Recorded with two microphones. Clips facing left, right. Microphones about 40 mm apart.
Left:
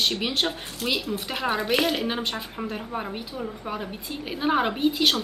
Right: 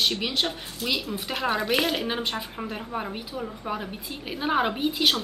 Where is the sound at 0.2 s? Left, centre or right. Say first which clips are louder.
Left 1 dB; centre.